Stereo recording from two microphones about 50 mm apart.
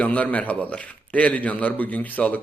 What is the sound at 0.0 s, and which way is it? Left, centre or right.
A man's voice, left.